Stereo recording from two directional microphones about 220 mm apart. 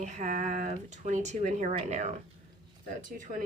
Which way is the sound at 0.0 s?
35° right (ahead or behind).